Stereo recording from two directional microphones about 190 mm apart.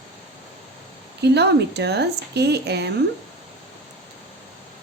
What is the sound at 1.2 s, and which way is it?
A woman's voice, 60° right (ahead or behind).